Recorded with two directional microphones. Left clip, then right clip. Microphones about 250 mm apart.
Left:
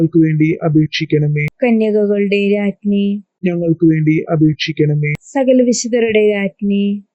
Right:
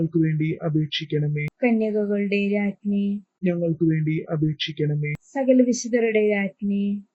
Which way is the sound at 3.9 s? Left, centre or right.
Left.